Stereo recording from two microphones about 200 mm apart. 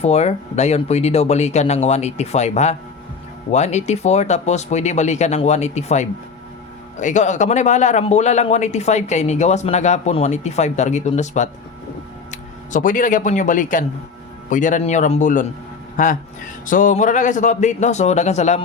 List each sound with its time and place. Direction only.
0.0 s a man's voice: 35° left (ahead or behind)
12.7 s a man's voice: 40° left (ahead or behind)